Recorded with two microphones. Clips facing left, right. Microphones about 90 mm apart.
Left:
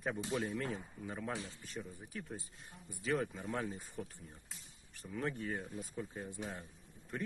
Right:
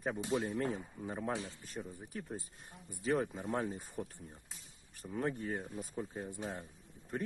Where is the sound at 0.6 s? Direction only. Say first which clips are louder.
Right 4 dB; 35° right (ahead or behind).